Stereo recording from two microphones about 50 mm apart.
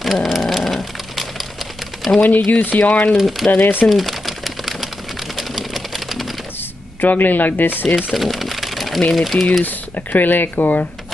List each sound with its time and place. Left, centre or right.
0.0 s a sound: centre
2.1 s speech: centre
2.4 s speech: left
3.2 s speech: centre
3.8 s typewriter: centre
5.3 s a sound: centre
7.0 s speech: left
8.1 s a sound: centre
9.1 s speech: centre
9.7 s speech: left